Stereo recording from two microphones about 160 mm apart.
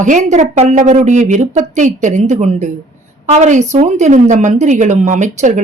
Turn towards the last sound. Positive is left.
turn(degrees=-50)  # may be behind; listen again after turning